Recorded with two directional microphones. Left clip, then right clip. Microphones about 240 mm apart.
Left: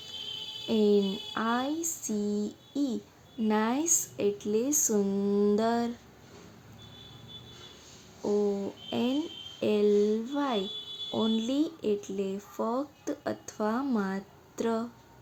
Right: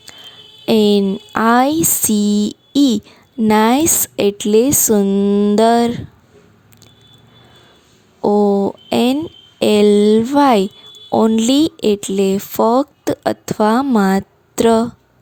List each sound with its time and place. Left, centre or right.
0.7 s speech: right
8.2 s a sound: right
9.6 s speech: right